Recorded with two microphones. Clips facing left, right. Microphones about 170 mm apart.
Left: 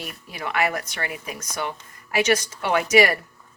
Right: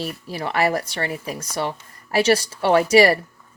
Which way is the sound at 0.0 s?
30° right (ahead or behind).